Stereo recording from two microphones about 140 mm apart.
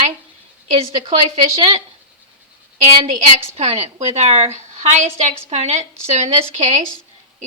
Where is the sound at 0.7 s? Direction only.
45° right (ahead or behind).